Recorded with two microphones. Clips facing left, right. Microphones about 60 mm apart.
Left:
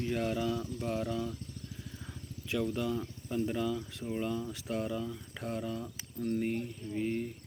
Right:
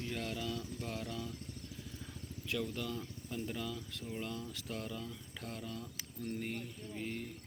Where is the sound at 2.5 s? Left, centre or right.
Centre.